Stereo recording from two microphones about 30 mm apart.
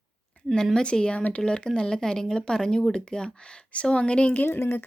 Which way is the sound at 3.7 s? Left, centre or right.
Left.